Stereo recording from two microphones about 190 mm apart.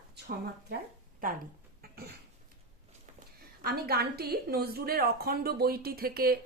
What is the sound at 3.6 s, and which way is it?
Speech, 55° right (ahead or behind).